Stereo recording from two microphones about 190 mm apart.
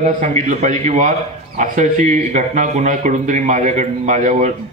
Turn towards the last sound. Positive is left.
turn(degrees=-40)  # may be behind; listen again after turning